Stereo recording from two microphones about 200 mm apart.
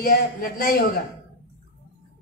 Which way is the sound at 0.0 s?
45° left (ahead or behind).